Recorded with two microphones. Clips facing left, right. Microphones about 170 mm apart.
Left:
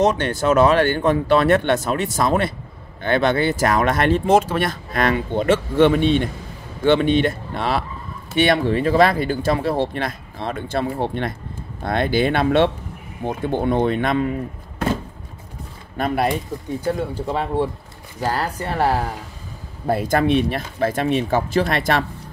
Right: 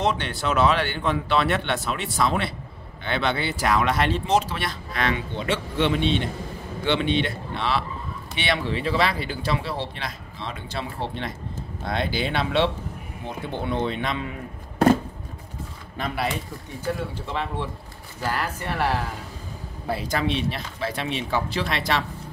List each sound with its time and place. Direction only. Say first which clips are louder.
0.0 s speech: left 7 dB; 45° left (ahead or behind)
16.0 s speech: left 7 dB; 50° left (ahead or behind)
19.9 s speech: left 8 dB; 50° left (ahead or behind)